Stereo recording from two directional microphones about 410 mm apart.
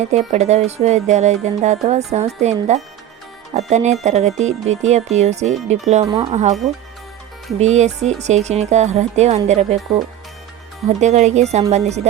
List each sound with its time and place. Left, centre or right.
0.3 s speech: centre
7.6 s speech: centre
10.8 s speech: centre